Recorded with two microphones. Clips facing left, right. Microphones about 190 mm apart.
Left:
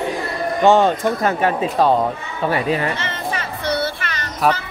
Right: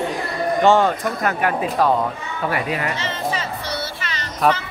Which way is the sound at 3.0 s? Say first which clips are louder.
Right 1 dB; 60° left (ahead or behind).